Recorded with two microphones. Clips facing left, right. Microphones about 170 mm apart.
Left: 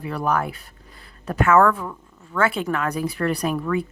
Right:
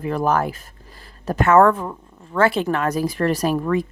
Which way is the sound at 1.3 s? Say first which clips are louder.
Right 3 dB; 35° right (ahead or behind).